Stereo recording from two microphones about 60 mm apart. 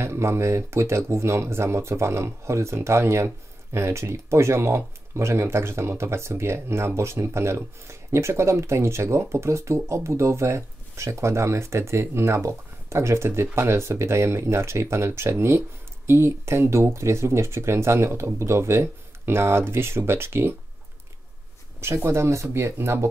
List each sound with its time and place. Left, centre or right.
0.0 s speech: right
21.7 s speech: right